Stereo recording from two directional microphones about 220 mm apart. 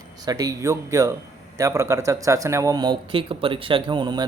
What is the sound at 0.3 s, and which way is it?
Speech, 15° right (ahead or behind).